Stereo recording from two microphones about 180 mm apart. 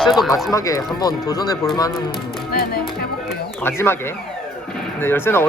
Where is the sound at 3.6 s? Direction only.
15° left (ahead or behind).